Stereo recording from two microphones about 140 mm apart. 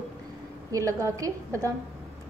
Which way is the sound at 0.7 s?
25° right (ahead or behind).